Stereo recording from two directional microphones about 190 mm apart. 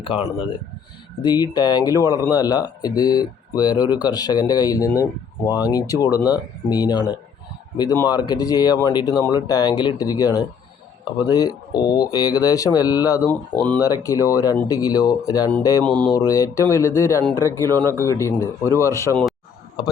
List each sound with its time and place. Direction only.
0.0 s speech: 30° left (ahead or behind)
15.8 s speech: 5° left (ahead or behind)
16.1 s speech: 15° left (ahead or behind)